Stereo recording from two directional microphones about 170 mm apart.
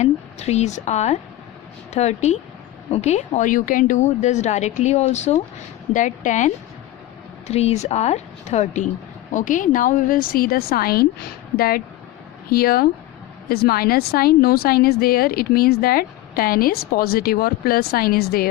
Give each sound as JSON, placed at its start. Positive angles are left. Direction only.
{"t": 0.0, "sound": "a woman's voice", "side_deg": 40}